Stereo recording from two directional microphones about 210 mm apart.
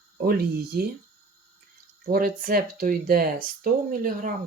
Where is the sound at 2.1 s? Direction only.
40° right (ahead or behind).